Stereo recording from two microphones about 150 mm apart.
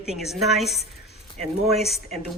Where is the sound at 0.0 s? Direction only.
5° right (ahead or behind).